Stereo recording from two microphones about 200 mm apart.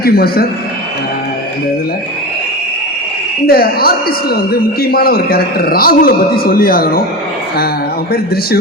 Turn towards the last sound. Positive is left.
turn(degrees=50)  # may be behind; listen again after turning